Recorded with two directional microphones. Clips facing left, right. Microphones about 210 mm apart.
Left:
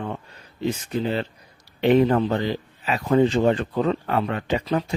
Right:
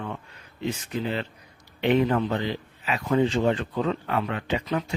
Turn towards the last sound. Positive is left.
turn(degrees=40)  # may be behind; listen again after turning